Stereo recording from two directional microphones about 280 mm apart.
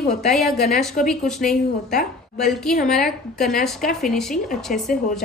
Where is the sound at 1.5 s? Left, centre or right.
Centre.